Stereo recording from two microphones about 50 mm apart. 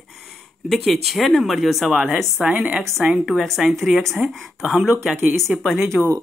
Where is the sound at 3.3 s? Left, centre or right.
Centre.